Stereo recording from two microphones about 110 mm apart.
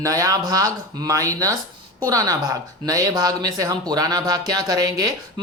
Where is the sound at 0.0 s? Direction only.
30° right (ahead or behind).